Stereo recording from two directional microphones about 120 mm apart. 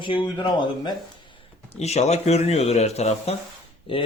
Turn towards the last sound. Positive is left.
turn(degrees=50)  # may be behind; listen again after turning